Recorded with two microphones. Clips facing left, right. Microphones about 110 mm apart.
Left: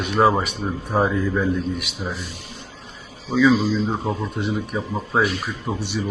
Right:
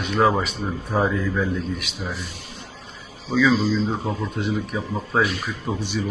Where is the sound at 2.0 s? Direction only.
20° left (ahead or behind).